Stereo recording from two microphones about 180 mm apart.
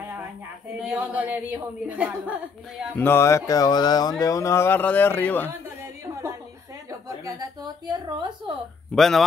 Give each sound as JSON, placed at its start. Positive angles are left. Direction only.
{"t": 0.8, "sound": "a woman's voice", "side_deg": -10}
{"t": 3.0, "sound": "speech", "side_deg": 15}
{"t": 6.9, "sound": "a woman's voice", "side_deg": -20}
{"t": 8.9, "sound": "speech", "side_deg": 0}